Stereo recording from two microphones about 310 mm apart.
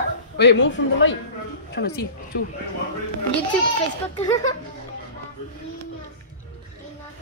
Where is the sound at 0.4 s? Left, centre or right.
Left.